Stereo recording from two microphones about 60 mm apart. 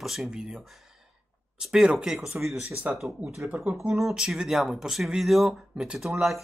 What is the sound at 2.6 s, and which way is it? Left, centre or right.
Speech, right.